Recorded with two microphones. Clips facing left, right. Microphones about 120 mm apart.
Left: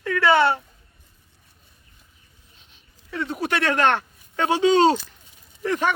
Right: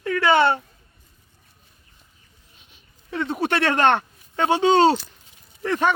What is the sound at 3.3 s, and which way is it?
Speech, 30° right (ahead or behind).